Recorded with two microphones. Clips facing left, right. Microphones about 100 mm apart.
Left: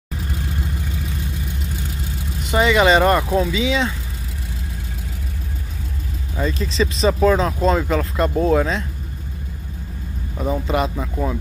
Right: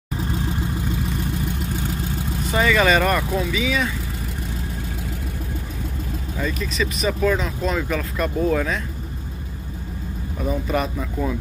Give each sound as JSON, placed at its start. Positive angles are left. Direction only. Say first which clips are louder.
{"t": 2.5, "sound": "speech", "louder": "left 3 dB", "side_deg": 20}
{"t": 6.3, "sound": "speech", "louder": "left 4 dB", "side_deg": 25}
{"t": 10.4, "sound": "speech", "louder": "left 2 dB", "side_deg": 20}